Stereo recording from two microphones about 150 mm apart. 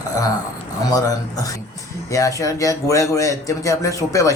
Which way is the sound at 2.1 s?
20° left (ahead or behind).